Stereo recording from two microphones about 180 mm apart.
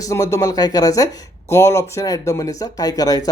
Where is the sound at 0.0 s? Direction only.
20° left (ahead or behind).